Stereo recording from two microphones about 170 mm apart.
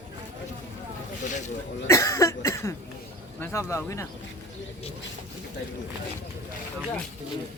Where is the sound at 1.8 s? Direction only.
15° left (ahead or behind).